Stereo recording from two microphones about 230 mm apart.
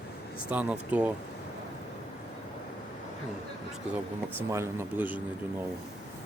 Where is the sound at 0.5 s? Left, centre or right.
Centre.